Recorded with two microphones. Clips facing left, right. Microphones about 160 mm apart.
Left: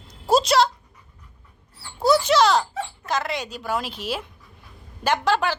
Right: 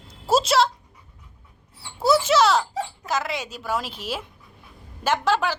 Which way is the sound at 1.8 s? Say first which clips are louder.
Left 1 dB; 5° right (ahead or behind).